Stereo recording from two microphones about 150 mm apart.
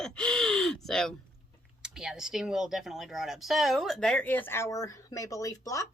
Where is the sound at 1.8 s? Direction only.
5° right (ahead or behind).